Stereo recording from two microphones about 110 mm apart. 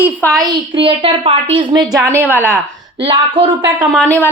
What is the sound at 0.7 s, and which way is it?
Speech, 60° right (ahead or behind).